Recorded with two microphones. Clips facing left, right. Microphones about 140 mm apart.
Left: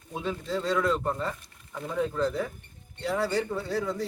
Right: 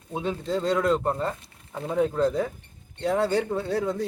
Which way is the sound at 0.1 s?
25° right (ahead or behind).